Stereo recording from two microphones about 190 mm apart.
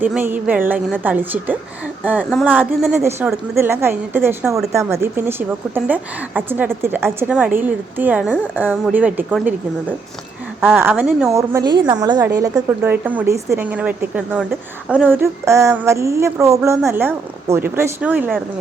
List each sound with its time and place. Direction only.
0.0 s a woman's voice: 10° right (ahead or behind)
10.6 s a woman's voice: 10° right (ahead or behind)